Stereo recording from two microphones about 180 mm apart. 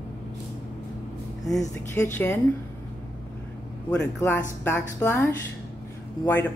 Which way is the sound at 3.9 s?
10° left (ahead or behind).